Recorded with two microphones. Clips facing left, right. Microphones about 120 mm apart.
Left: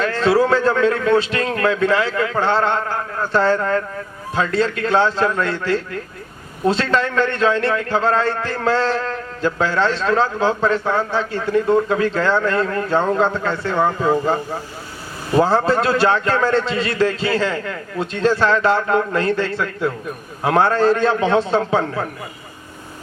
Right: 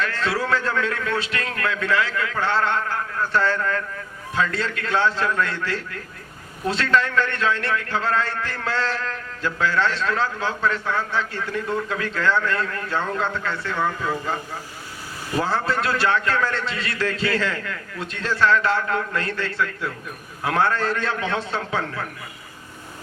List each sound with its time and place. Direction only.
0.0 s a man's voice: 25° left (ahead or behind)